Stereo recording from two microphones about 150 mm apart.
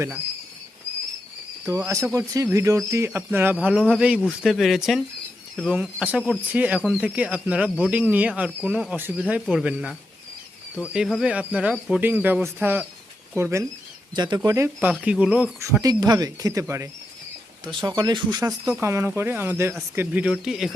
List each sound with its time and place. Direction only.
1.6 s speech: 20° right (ahead or behind)
3.8 s speech: centre (ahead or behind)
11.2 s speech: 10° right (ahead or behind)
14.2 s speech: 30° right (ahead or behind); by 15.5 s 10° right (ahead or behind)
15.6 s speech: 20° right (ahead or behind)
17.7 s speech: 30° right (ahead or behind); by 20.7 s 5° right (ahead or behind)